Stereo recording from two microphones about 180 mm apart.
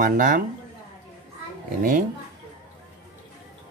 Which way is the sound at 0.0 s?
50° right (ahead or behind).